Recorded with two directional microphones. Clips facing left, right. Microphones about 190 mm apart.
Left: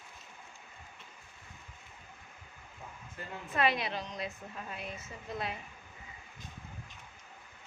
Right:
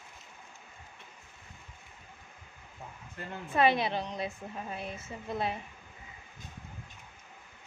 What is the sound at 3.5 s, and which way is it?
Speech, 30° right (ahead or behind).